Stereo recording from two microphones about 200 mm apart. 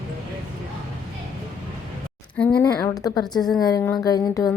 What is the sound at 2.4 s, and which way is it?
Speech, 5° left (ahead or behind).